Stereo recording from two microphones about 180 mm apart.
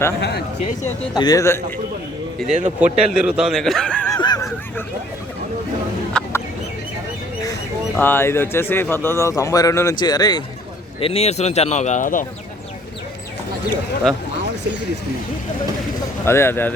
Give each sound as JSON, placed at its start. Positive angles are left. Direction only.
{"t": 0.2, "sound": "speech", "side_deg": 65}
{"t": 1.1, "sound": "a man's voice", "side_deg": 20}
{"t": 2.6, "sound": "a man's voice", "side_deg": -40}
{"t": 3.2, "sound": "speech", "side_deg": -5}
{"t": 4.1, "sound": "a sound", "side_deg": 20}
{"t": 6.2, "sound": "chicken", "side_deg": 5}
{"t": 7.9, "sound": "a man's voice", "side_deg": 10}
{"t": 11.0, "sound": "speech", "side_deg": 35}
{"t": 14.1, "sound": "speech", "side_deg": 0}
{"t": 16.2, "sound": "a man's voice", "side_deg": 15}